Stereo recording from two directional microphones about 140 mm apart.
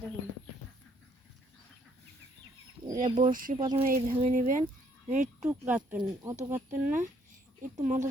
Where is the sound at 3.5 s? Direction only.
35° right (ahead or behind).